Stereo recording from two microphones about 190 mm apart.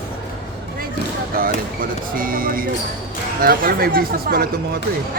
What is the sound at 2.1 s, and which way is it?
Speech, 50° right (ahead or behind).